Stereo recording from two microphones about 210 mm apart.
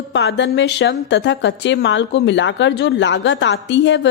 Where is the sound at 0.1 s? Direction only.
55° left (ahead or behind).